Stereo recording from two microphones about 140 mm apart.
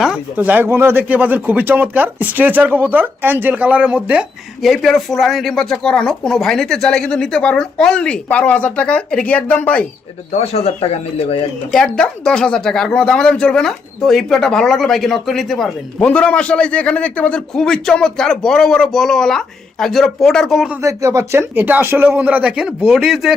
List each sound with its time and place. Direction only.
0.0 s speech: 10° right (ahead or behind); by 9.8 s 10° left (ahead or behind)
10.3 s speech: 45° left (ahead or behind)
11.7 s speech: 5° left (ahead or behind)
20.8 s speech: 20° right (ahead or behind); by 23.3 s 5° right (ahead or behind)